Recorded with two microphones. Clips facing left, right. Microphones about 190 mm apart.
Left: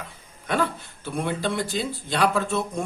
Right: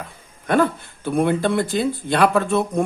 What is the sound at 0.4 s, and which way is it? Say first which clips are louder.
Speech: right 7 dB; 50° right (ahead or behind).